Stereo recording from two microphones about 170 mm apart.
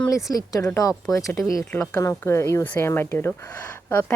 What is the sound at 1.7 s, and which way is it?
Speech, 10° left (ahead or behind).